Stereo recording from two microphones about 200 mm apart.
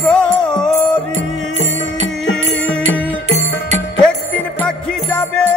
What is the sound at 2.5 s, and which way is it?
Music, 5° left (ahead or behind).